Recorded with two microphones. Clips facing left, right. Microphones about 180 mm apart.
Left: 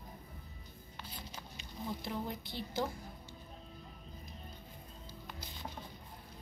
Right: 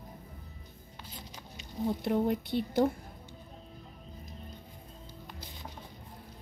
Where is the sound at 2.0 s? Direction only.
65° right (ahead or behind).